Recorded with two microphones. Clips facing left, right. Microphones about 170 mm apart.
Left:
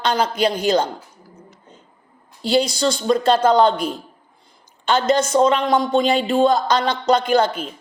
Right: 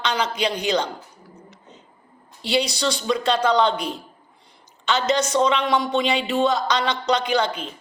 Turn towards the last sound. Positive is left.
turn(degrees=50)  # may be behind; listen again after turning